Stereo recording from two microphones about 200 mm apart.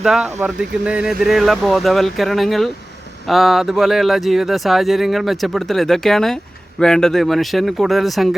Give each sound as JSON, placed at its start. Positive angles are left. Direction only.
{"t": 0.0, "sound": "speech", "side_deg": -5}